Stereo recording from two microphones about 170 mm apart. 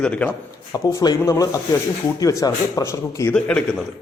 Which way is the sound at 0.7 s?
20° left (ahead or behind).